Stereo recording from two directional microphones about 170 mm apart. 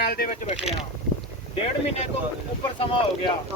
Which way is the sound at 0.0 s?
65° left (ahead or behind).